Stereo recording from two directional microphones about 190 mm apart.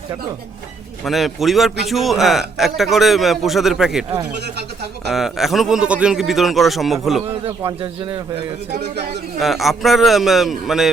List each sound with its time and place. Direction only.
1.0 s a man's voice: centre (ahead or behind)
4.4 s a man's voice: 60° right (ahead or behind)
5.0 s a man's voice: centre (ahead or behind)
7.3 s speech: 25° right (ahead or behind)
8.8 s a man's voice: 60° right (ahead or behind)
9.4 s a man's voice: centre (ahead or behind)